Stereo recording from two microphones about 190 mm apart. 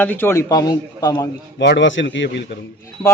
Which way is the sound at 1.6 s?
70° left (ahead or behind).